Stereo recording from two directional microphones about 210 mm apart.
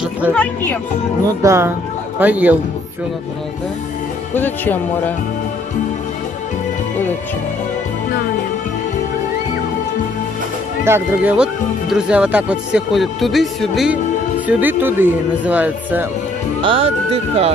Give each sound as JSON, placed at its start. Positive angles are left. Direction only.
{"t": 0.3, "sound": "speech", "side_deg": 10}
{"t": 1.4, "sound": "speech", "side_deg": -15}
{"t": 4.3, "sound": "speech", "side_deg": 10}
{"t": 10.9, "sound": "speech", "side_deg": -10}
{"t": 16.6, "sound": "speech", "side_deg": -25}